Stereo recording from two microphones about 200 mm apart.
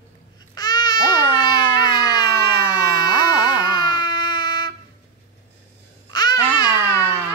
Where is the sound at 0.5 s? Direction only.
20° left (ahead or behind).